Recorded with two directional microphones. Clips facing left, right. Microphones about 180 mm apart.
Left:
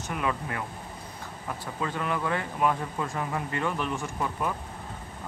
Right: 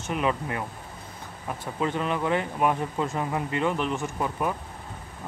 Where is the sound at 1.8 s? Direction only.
20° right (ahead or behind).